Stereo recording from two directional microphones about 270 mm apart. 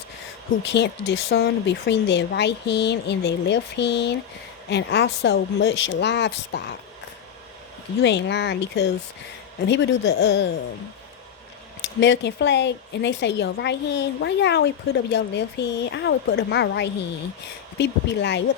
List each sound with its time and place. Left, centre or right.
0.6 s a woman's voice: left
8.0 s a woman's voice: left
11.9 s a woman's voice: left